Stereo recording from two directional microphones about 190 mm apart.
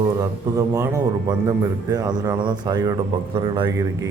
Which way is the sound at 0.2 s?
15° right (ahead or behind).